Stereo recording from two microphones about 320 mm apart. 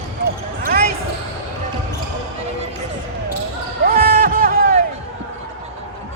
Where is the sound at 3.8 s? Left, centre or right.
Right.